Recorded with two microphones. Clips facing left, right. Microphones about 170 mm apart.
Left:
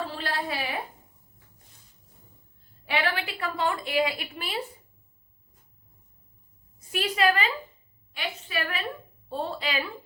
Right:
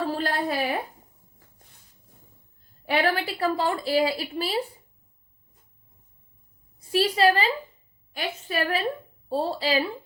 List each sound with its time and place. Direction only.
0.0 s a sound: 45° right (ahead or behind)
2.8 s a woman's voice: 40° right (ahead or behind)
6.7 s a woman's voice: 30° right (ahead or behind)